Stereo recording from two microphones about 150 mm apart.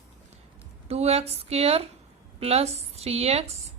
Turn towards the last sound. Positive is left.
turn(degrees=-45)  # may be behind; listen again after turning